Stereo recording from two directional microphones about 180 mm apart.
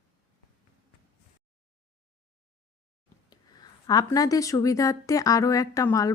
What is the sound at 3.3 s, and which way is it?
Speech, 20° left (ahead or behind).